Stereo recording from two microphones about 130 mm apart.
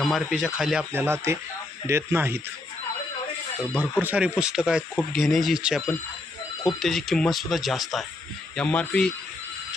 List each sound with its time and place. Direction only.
0.0 s speech: centre (ahead or behind)
0.9 s speech: 20° right (ahead or behind)
3.6 s speech: 15° left (ahead or behind)
4.0 s speech: 10° right (ahead or behind)
6.8 s speech: centre (ahead or behind)
8.5 s speech: 10° left (ahead or behind)